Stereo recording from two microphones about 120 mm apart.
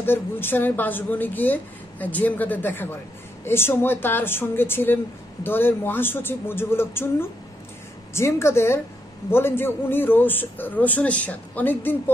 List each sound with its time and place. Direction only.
0.0 s a woman's voice: 20° left (ahead or behind)